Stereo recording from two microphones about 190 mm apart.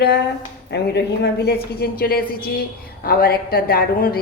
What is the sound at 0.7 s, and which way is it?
A woman's voice, 60° left (ahead or behind).